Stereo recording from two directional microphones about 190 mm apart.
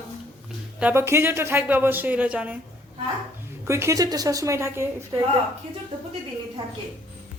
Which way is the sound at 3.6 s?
15° right (ahead or behind).